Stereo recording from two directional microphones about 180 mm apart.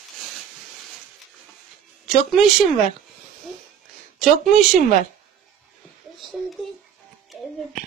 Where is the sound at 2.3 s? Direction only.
Centre (ahead or behind).